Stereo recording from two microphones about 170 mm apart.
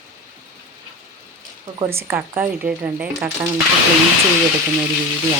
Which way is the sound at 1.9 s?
15° right (ahead or behind).